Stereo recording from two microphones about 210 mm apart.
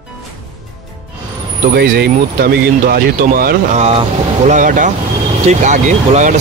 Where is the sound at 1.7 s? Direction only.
45° right (ahead or behind).